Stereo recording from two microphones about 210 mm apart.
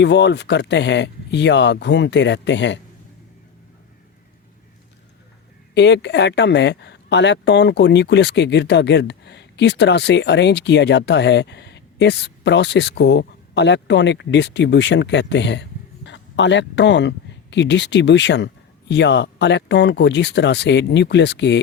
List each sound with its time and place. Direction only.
0.0 s speech: 55° left (ahead or behind)
5.7 s speech: 55° left (ahead or behind)